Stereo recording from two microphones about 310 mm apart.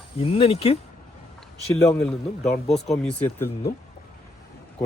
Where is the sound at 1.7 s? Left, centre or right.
Centre.